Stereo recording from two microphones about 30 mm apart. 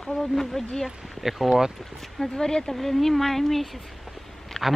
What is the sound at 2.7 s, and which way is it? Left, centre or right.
Speech, centre.